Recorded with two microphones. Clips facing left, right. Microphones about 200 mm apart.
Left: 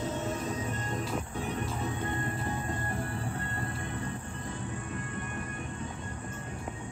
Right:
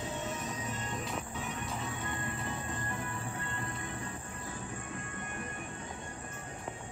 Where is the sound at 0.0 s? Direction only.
45° left (ahead or behind).